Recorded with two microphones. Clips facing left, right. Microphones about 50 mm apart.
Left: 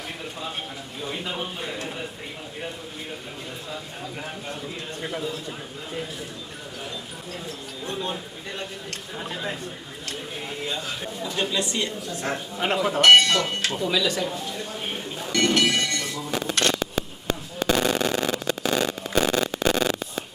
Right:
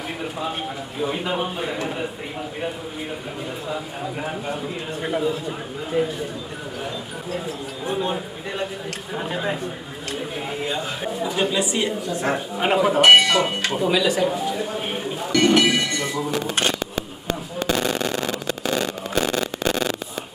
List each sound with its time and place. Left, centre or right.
0.2 s speech: centre
3.7 s speech: centre
7.3 s speech: centre